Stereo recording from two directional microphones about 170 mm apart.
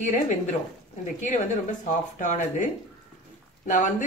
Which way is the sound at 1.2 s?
45° left (ahead or behind).